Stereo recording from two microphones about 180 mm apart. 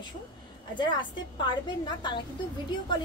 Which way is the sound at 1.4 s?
25° left (ahead or behind).